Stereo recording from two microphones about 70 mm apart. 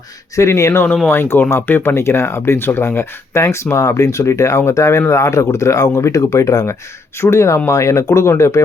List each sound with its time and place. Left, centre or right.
0.3 s speech: left
1.0 s speech: left
7.2 s speech: left